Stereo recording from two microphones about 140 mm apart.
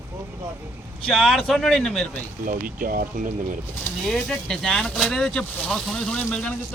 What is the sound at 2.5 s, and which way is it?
Speech, 90° right.